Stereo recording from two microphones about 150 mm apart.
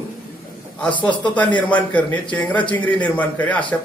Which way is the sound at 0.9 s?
30° left (ahead or behind).